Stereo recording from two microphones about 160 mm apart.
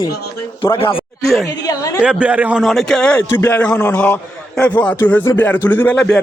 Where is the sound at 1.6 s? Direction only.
25° left (ahead or behind).